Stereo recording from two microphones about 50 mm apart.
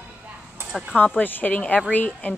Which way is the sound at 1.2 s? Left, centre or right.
Left.